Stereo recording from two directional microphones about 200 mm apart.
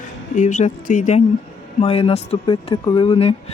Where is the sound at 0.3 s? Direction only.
40° left (ahead or behind).